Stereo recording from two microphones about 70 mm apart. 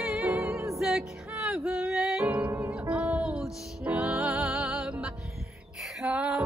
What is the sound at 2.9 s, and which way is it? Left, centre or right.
Music, centre.